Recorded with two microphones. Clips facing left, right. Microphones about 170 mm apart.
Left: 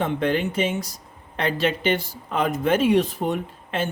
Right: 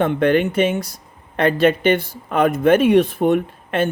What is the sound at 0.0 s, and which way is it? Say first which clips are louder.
Speech: right 6 dB; 60° right (ahead or behind).